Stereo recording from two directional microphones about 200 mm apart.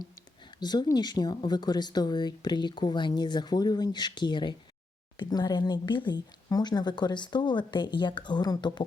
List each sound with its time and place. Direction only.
0.6 s speech: 20° left (ahead or behind)